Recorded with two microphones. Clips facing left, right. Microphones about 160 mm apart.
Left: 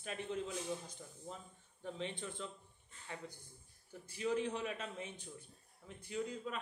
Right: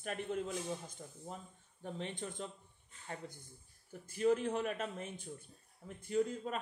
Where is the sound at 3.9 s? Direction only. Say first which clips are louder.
Right 6 dB; 50° right (ahead or behind).